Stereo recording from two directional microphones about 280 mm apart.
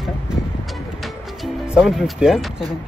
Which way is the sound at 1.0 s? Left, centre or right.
Centre.